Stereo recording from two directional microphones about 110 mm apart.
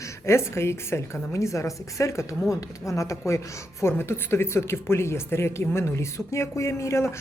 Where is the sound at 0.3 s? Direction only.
25° left (ahead or behind).